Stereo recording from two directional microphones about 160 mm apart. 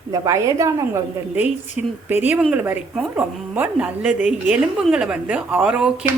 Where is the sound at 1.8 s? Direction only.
10° right (ahead or behind).